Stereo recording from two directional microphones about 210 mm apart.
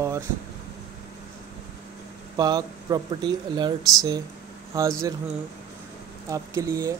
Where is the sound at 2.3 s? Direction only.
20° right (ahead or behind).